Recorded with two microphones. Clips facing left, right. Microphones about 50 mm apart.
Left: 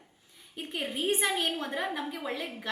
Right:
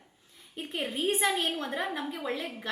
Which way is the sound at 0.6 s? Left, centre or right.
Centre.